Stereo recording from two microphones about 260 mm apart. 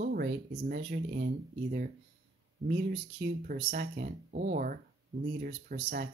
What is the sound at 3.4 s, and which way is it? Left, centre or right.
Speech, right.